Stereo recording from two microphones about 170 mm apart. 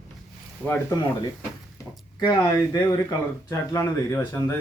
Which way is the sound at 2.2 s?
25° left (ahead or behind).